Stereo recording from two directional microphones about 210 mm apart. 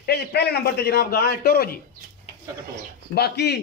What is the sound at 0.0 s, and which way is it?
A man's voice, 50° left (ahead or behind).